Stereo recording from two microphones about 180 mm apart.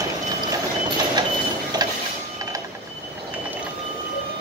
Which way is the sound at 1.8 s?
20° right (ahead or behind).